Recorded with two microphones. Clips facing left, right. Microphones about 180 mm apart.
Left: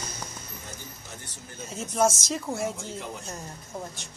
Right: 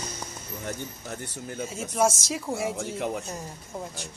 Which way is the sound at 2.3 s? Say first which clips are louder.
Even; 10° right (ahead or behind).